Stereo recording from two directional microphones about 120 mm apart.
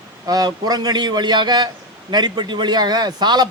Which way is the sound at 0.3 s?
35° right (ahead or behind).